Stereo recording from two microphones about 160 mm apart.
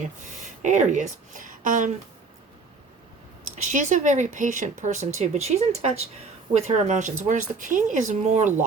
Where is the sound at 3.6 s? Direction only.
50° right (ahead or behind).